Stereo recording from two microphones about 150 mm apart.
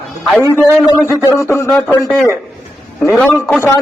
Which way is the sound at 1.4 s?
20° left (ahead or behind).